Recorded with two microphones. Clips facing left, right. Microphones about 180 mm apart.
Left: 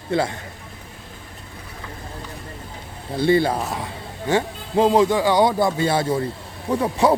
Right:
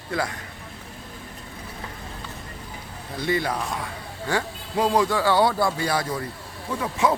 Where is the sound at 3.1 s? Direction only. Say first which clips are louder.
Left 7 dB; 30° left (ahead or behind).